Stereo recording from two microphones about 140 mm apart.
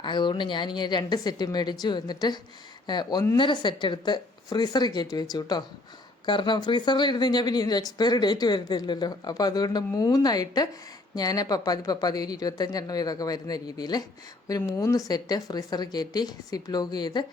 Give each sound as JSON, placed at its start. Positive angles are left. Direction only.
{"t": 0.0, "sound": "a woman's voice", "side_deg": 35}